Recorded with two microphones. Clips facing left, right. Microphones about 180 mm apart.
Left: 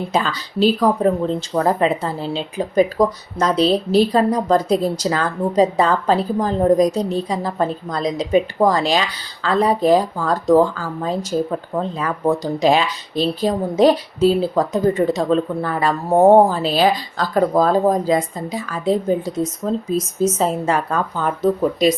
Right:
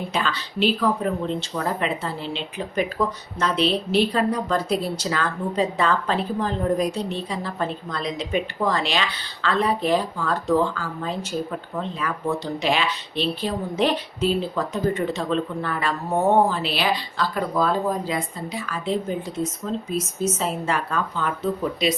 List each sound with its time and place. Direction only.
0.1 s speech: 40° left (ahead or behind)